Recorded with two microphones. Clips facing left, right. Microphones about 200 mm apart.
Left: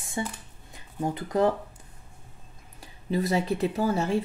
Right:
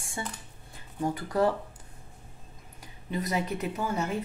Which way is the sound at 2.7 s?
30° left (ahead or behind).